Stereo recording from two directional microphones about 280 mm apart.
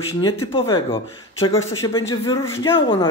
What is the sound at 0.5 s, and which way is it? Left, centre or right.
Speech, centre.